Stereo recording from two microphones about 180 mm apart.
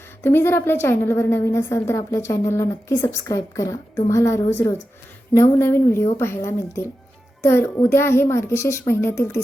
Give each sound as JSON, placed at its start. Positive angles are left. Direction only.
{"t": 0.2, "sound": "a woman's voice", "side_deg": 15}